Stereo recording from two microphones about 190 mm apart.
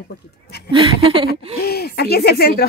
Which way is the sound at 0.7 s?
25° right (ahead or behind).